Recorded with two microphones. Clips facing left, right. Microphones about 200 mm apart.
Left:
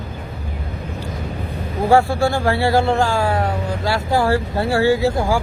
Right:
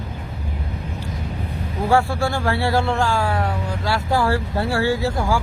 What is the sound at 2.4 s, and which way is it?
Speech, 10° left (ahead or behind).